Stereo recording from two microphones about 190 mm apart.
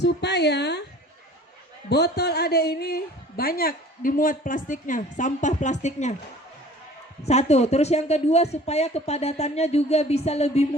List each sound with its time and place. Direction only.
0.0 s speech: 60° left (ahead or behind)
1.9 s a woman's voice: 60° left (ahead or behind); by 6.1 s 40° left (ahead or behind)
7.2 s speech: 35° left (ahead or behind)